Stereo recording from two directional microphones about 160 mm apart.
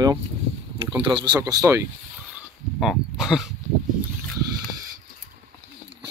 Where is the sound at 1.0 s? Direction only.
30° right (ahead or behind).